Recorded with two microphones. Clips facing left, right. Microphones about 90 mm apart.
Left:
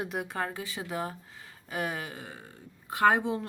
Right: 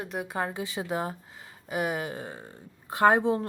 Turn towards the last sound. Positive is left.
turn(degrees=-35)  # may be behind; listen again after turning